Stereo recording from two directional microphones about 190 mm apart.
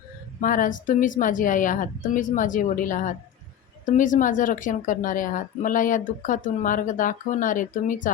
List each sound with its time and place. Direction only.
0.4 s speech: 45° left (ahead or behind)